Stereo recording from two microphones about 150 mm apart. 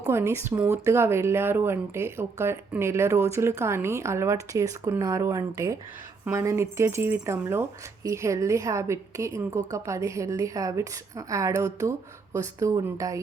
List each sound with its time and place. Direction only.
0.0 s speech: 20° right (ahead or behind)